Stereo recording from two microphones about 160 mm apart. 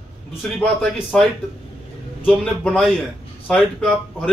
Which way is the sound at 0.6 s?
5° left (ahead or behind).